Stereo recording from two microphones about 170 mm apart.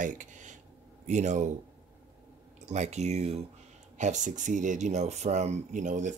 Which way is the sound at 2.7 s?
40° right (ahead or behind).